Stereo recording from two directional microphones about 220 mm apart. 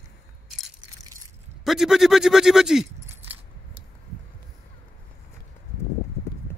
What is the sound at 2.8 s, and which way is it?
Keys jangling, 30° right (ahead or behind).